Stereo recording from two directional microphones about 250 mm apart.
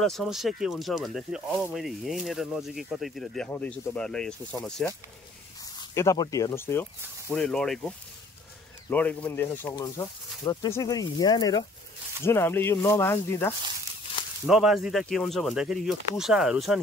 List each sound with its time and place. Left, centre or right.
0.0 s speech: centre
5.8 s speech: centre
8.9 s speech: centre
14.4 s speech: centre